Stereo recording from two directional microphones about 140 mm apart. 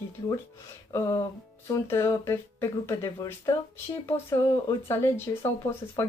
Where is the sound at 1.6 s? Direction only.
20° left (ahead or behind).